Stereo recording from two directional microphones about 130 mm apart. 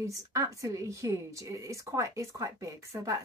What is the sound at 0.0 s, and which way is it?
Speech, 25° right (ahead or behind).